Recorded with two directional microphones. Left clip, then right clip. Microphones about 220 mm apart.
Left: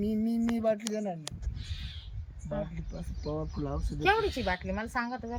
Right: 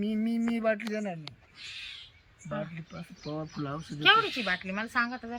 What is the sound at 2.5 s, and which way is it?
A woman's voice, 10° left (ahead or behind).